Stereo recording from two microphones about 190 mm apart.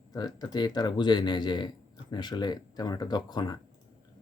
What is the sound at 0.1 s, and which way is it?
Speech, 20° left (ahead or behind).